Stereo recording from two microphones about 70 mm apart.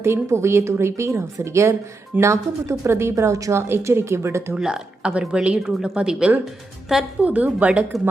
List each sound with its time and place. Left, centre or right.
0.0 s speech: right
4.5 s speech: centre
7.2 s a woman's voice: right